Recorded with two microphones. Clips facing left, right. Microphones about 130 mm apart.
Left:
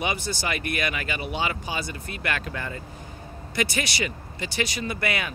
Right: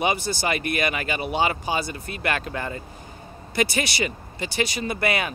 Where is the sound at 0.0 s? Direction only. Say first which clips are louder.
Right 4 dB; 30° right (ahead or behind).